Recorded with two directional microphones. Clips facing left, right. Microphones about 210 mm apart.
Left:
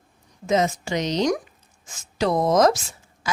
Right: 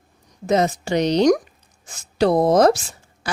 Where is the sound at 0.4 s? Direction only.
35° right (ahead or behind).